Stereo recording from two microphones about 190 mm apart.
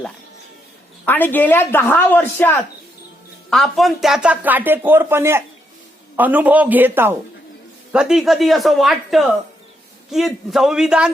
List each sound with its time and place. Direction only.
1.0 s speech: 10° left (ahead or behind)